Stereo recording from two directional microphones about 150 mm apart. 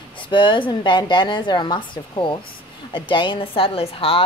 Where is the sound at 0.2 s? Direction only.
35° left (ahead or behind).